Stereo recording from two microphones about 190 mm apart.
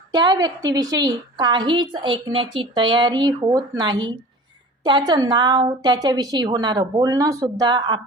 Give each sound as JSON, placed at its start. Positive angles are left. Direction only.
{"t": 0.1, "sound": "a woman's voice", "side_deg": -20}